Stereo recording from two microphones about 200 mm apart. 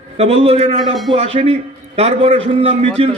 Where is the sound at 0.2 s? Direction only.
30° right (ahead or behind).